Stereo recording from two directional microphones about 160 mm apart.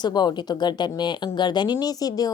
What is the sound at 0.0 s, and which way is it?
A woman's voice, 25° left (ahead or behind).